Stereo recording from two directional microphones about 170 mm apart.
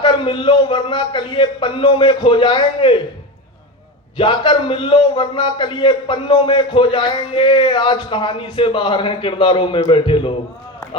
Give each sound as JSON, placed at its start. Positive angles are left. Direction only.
{"t": 0.0, "sound": "a man's voice", "side_deg": 30}
{"t": 4.2, "sound": "a man's voice", "side_deg": 30}